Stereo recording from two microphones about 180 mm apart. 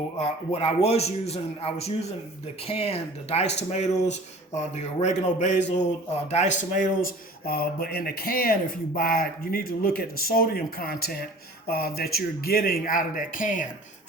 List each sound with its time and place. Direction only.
0.2 s a man's voice: 35° left (ahead or behind)